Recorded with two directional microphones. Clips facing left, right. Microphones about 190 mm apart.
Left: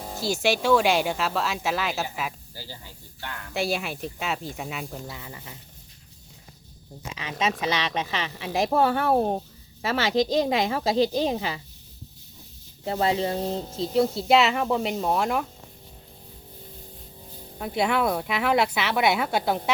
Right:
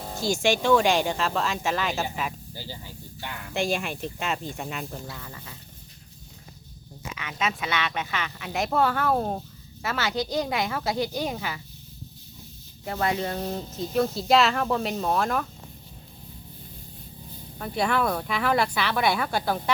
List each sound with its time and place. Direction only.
0.0 s music: 5° left (ahead or behind)
0.4 s speech: 5° left (ahead or behind)
2.6 s speech: 15° right (ahead or behind)
3.5 s speech: 5° left (ahead or behind)
7.1 s a woman's voice: 30° left (ahead or behind)
12.8 s a woman's voice: 25° left (ahead or behind)
14.5 s speech: 10° left (ahead or behind)
17.6 s speech: 15° left (ahead or behind)
18.3 s a woman's voice: 20° left (ahead or behind)